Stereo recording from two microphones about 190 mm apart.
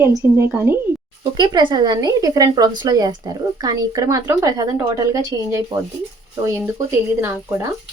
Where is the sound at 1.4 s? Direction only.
20° right (ahead or behind).